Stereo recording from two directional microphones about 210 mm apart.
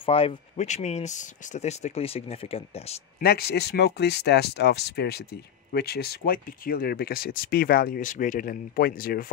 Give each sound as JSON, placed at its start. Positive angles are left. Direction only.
{"t": 0.0, "sound": "speech", "side_deg": 25}
{"t": 3.2, "sound": "speech", "side_deg": 50}